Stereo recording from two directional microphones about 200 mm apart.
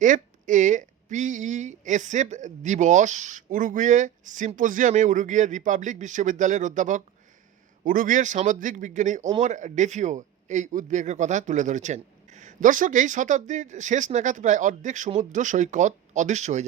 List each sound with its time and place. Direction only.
0.0 s a man's voice: 40° right (ahead or behind)